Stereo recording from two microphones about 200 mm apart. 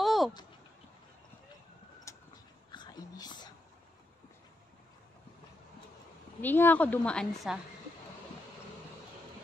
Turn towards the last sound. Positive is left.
turn(degrees=0)  # may be behind; listen again after turning